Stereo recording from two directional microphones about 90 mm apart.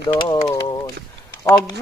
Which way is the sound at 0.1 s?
65° left (ahead or behind).